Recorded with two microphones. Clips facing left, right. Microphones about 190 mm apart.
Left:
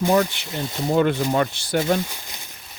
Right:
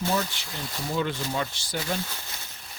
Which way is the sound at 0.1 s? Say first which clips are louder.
Left 9 dB; 60° left (ahead or behind).